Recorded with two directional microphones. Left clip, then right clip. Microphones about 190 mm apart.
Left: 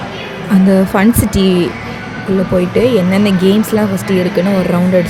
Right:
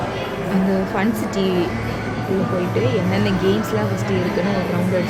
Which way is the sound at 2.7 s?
45° left (ahead or behind).